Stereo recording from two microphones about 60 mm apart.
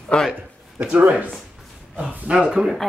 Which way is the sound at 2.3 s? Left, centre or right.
Centre.